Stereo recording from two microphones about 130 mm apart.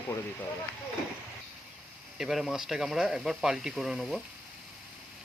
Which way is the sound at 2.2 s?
Centre (ahead or behind).